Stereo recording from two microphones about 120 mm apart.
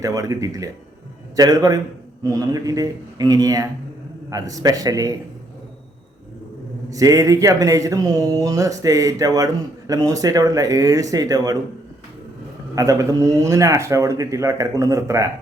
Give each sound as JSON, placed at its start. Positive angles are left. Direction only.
{"t": 0.0, "sound": "a man's voice", "side_deg": -30}
{"t": 6.9, "sound": "speech", "side_deg": -30}
{"t": 12.7, "sound": "speech", "side_deg": -30}